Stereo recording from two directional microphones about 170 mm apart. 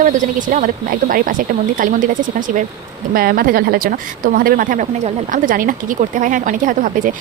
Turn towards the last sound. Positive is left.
turn(degrees=-50)  # may be behind; listen again after turning